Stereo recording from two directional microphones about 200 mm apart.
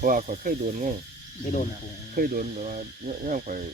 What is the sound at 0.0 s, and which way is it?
Speech, 40° right (ahead or behind).